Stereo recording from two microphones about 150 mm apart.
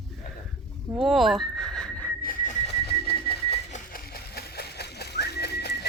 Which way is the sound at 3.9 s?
90° left.